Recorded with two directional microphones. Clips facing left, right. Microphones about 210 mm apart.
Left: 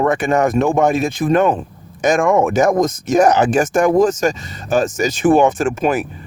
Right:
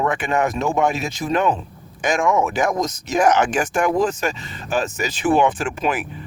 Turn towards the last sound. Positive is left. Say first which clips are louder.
# left 6 dB
turn(degrees=45)  # may be behind; listen again after turning